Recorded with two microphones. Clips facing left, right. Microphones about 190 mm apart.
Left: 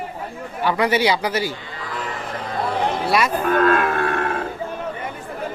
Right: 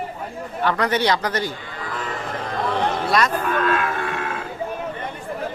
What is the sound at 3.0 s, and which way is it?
Music, 5° left (ahead or behind).